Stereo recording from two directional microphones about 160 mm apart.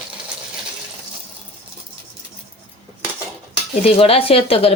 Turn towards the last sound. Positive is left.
turn(degrees=40)  # may be behind; listen again after turning